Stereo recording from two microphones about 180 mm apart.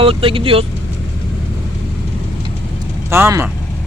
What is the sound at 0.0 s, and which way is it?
Speech, 30° right (ahead or behind).